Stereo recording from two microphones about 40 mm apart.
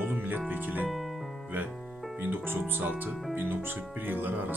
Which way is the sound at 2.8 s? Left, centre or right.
Right.